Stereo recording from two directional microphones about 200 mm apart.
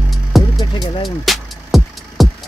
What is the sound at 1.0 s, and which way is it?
Music, centre (ahead or behind).